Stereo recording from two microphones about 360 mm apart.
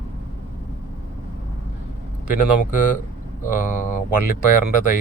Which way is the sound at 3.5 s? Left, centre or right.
Left.